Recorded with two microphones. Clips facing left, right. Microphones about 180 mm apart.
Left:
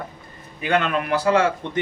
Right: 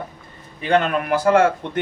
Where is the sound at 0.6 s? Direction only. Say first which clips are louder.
Right 3 dB; 35° right (ahead or behind); by 1.8 s 55° right (ahead or behind).